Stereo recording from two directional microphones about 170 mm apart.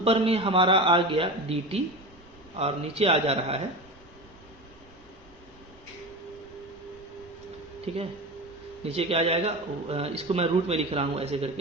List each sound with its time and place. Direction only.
0.0 s a man's voice: 35° right (ahead or behind)
7.9 s a man's voice: 35° right (ahead or behind)